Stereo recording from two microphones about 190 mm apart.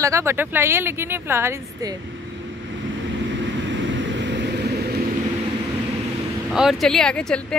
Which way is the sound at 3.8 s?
70° right (ahead or behind).